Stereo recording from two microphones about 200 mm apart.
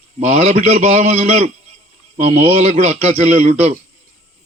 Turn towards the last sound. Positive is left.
turn(degrees=-35)  # may be behind; listen again after turning